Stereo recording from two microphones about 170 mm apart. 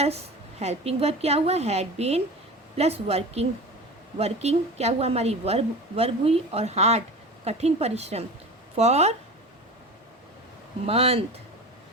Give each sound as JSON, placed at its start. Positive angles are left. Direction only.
{"t": 0.6, "sound": "a woman's voice", "side_deg": -40}
{"t": 10.8, "sound": "a woman's voice", "side_deg": -35}